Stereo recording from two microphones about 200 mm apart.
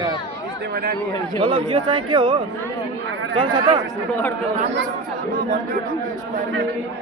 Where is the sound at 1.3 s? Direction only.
25° right (ahead or behind).